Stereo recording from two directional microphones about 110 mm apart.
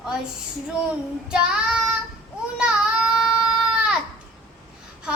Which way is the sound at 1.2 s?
5° right (ahead or behind).